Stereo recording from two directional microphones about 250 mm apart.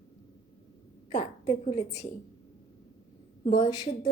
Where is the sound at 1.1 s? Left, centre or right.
Left.